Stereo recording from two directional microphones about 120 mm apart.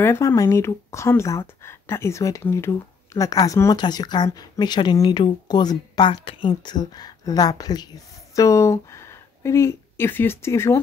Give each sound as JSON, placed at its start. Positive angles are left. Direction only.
{"t": 0.0, "sound": "speech", "side_deg": 20}